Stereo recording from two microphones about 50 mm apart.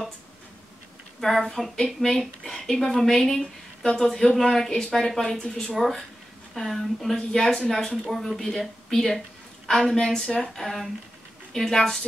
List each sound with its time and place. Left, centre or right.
1.2 s speech: centre